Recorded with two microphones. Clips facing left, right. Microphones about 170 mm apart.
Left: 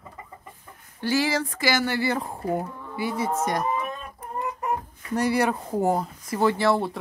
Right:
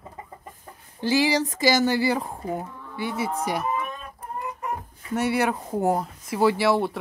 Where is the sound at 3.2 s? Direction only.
5° right (ahead or behind).